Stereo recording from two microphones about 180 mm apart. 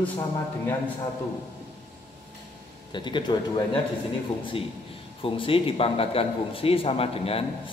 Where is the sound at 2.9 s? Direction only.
25° left (ahead or behind).